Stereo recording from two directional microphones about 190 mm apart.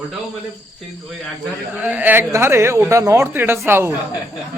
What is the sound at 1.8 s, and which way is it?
Speech, 10° right (ahead or behind).